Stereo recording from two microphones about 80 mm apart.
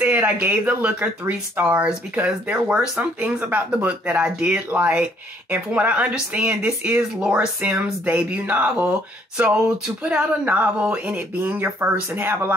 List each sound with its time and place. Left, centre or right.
0.0 s speech: centre
10.0 s speech: centre